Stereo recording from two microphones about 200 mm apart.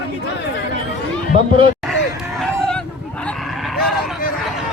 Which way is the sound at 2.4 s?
5° left (ahead or behind).